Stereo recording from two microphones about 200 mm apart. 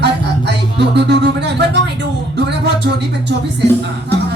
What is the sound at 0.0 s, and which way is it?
Music, 60° right (ahead or behind).